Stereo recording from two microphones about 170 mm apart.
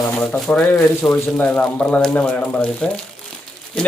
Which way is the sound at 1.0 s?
5° left (ahead or behind).